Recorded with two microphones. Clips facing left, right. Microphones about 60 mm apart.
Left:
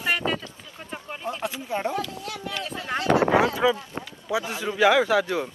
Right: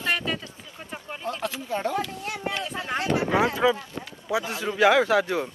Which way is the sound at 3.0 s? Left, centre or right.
Left.